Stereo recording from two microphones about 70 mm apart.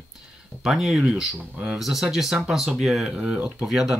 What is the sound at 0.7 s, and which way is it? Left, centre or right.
Speech, centre.